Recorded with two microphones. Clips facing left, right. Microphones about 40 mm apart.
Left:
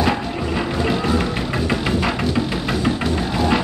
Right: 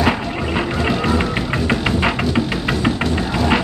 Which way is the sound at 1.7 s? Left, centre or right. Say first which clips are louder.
Right 3 dB; right.